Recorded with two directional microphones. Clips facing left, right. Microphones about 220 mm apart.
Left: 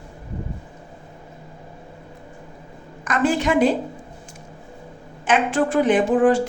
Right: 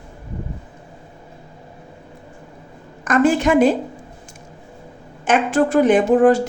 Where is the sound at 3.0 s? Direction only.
45° right (ahead or behind).